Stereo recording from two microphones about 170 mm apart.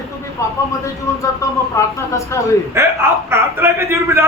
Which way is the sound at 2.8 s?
15° right (ahead or behind).